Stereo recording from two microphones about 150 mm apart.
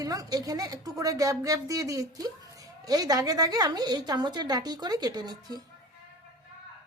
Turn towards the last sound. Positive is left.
turn(degrees=-25)  # may be behind; listen again after turning